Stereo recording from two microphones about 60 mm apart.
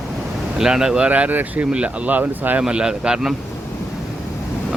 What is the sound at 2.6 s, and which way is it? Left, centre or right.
Speech, centre.